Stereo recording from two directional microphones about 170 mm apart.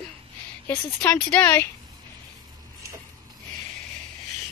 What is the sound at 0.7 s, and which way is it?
A woman's voice, 10° left (ahead or behind).